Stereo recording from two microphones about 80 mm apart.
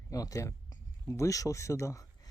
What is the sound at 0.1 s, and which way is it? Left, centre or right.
Speech, left.